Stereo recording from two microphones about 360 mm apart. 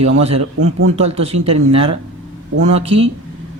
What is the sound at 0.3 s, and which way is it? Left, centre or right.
Speech, right.